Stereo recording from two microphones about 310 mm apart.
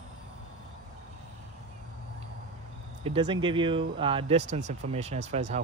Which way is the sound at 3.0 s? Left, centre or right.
Centre.